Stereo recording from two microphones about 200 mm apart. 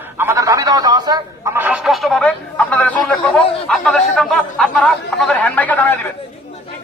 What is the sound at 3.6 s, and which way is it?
Chatter, 5° left (ahead or behind).